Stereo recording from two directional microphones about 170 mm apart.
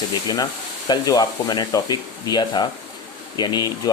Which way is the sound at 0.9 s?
25° left (ahead or behind).